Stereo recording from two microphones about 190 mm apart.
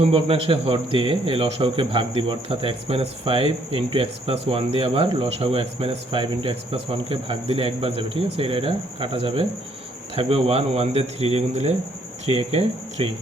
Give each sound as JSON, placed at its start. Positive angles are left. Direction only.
{"t": 0.0, "sound": "a man's voice", "side_deg": -30}